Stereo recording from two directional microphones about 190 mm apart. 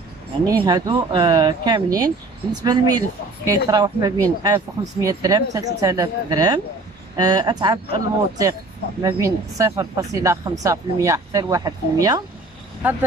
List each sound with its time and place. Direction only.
0.5 s a woman's voice: 20° right (ahead or behind)